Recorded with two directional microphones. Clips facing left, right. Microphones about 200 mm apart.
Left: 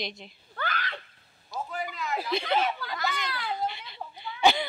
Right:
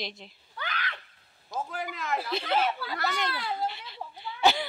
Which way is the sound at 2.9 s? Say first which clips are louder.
Right 1 dB; 70° right (ahead or behind).